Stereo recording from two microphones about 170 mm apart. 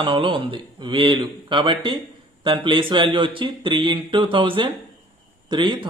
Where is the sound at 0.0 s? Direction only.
30° right (ahead or behind).